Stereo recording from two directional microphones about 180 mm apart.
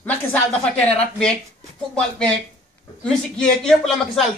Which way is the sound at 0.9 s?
5° left (ahead or behind).